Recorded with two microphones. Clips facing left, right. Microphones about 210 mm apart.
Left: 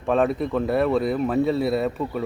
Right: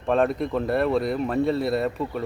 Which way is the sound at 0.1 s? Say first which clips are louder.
Left 1 dB; centre (ahead or behind).